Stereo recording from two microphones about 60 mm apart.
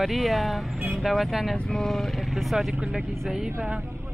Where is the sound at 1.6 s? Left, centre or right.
Centre.